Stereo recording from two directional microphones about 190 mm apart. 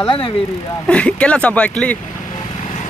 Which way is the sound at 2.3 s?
40° left (ahead or behind).